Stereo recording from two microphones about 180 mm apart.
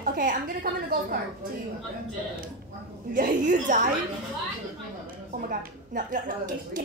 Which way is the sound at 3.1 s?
45° right (ahead or behind).